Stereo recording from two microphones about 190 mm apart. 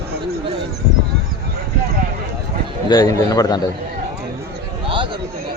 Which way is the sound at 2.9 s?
20° left (ahead or behind).